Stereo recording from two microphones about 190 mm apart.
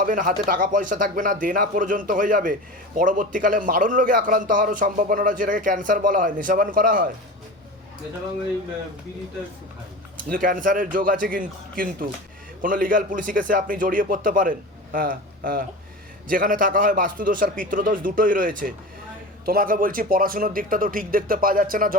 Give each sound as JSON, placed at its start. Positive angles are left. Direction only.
{"t": 0.0, "sound": "speech", "side_deg": -45}
{"t": 10.2, "sound": "speech", "side_deg": -45}